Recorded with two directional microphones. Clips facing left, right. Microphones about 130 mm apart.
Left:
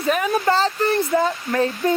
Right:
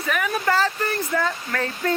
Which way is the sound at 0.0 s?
25° left (ahead or behind).